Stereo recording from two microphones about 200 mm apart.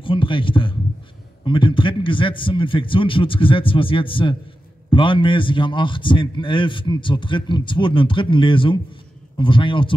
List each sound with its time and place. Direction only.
0.0 s a man's voice: 25° left (ahead or behind)